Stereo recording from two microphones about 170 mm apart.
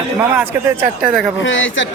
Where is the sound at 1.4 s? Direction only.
90° left.